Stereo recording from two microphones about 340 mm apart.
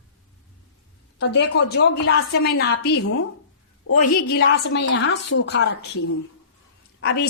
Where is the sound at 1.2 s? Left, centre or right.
Left.